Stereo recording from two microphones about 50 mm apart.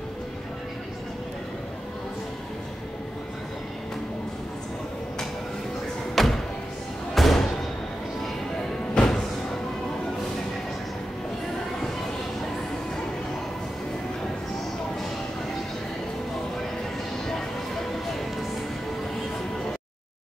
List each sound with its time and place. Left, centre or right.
6.1 s thump: centre
7.2 s music: centre
8.9 s music: centre